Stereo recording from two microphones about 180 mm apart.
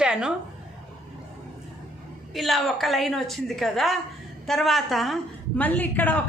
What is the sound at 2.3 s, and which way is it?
A woman's voice, centre (ahead or behind).